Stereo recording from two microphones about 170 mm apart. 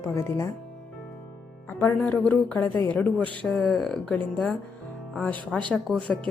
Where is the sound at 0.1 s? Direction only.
15° left (ahead or behind).